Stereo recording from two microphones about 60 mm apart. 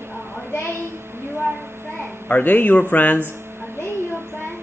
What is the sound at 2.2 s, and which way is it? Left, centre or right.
Speech, left.